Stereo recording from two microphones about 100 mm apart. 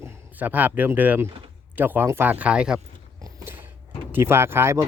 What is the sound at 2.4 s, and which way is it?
Speech, 10° right (ahead or behind).